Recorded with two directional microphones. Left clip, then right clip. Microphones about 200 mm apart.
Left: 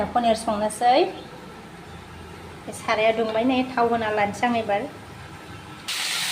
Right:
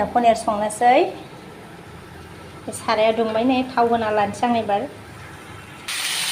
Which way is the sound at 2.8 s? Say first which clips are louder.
Right 3 dB; 10° right (ahead or behind).